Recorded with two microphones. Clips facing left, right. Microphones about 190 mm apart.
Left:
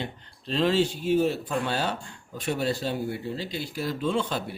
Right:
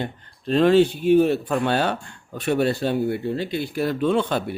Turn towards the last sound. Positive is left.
turn(degrees=-60)  # may be behind; listen again after turning